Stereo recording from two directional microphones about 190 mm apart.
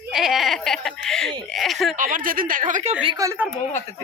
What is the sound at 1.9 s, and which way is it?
Speech, 45° right (ahead or behind).